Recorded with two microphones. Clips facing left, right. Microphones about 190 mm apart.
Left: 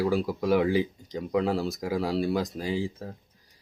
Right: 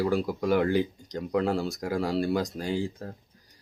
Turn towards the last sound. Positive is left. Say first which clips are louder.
# even
turn(degrees=0)  # may be behind; listen again after turning